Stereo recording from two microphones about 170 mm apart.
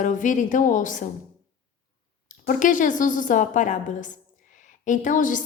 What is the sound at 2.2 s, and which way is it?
A woman's voice, 50° left (ahead or behind).